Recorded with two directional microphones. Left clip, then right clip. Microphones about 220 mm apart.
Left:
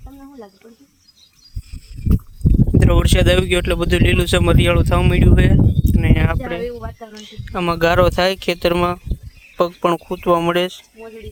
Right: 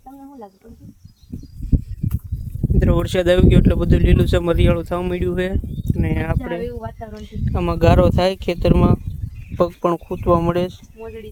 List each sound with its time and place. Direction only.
2.7 s speech: 5° right (ahead or behind)
6.7 s speech: 30° right (ahead or behind)
7.1 s speech: 15° right (ahead or behind)